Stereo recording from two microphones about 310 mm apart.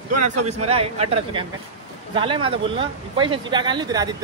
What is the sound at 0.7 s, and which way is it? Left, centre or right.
Speech, centre.